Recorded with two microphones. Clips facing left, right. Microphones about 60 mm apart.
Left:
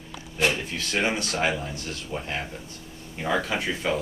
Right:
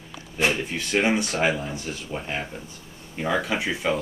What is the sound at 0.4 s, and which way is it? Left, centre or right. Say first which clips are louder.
Speech: right 1 dB; centre.